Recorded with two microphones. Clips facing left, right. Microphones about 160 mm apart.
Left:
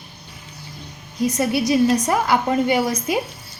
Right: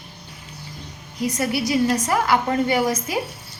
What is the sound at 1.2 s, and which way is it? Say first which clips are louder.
A woman's voice: left 3 dB; 20° left (ahead or behind).